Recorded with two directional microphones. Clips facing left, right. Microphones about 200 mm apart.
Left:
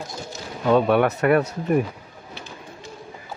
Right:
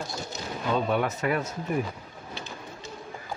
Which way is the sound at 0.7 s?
70° left (ahead or behind).